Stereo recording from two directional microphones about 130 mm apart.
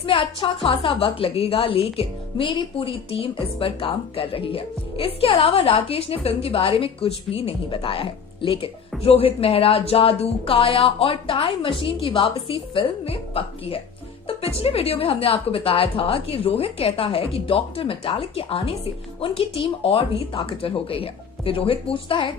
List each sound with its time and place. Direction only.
0.0 s a woman's voice: 45° left (ahead or behind)